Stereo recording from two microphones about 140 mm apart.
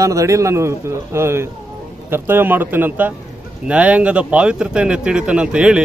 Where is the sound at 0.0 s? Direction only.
25° right (ahead or behind).